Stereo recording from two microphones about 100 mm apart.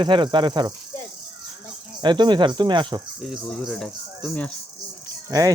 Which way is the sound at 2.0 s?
50° right (ahead or behind).